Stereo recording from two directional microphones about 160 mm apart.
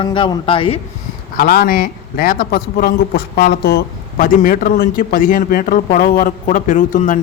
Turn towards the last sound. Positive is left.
turn(degrees=55)  # may be behind; listen again after turning